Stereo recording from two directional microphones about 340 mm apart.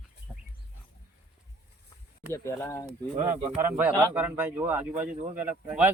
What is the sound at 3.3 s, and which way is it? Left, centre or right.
A man's voice, centre.